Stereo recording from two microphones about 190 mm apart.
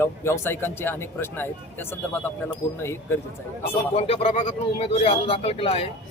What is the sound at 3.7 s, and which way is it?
A man's voice, 30° left (ahead or behind).